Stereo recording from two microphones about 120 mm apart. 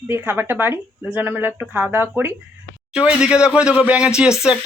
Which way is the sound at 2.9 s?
5° right (ahead or behind).